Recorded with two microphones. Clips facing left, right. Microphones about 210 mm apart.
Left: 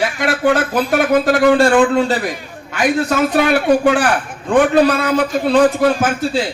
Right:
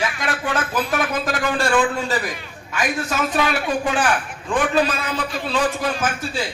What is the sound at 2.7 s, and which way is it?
A man's voice, 65° left (ahead or behind).